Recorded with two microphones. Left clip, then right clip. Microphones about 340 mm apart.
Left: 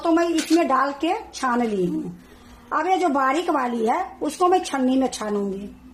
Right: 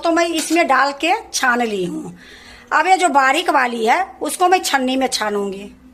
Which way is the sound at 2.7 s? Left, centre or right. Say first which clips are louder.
Right 7 dB; right.